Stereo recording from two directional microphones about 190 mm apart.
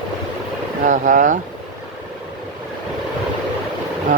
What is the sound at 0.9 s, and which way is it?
Speech, 45° right (ahead or behind).